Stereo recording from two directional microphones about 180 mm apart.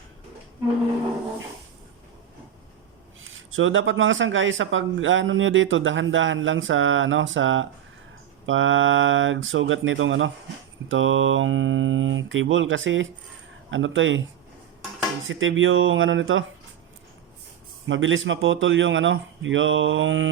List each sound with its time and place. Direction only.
3.2 s speech: 90° right
15.3 s speech: 90° right
17.8 s speech: 90° right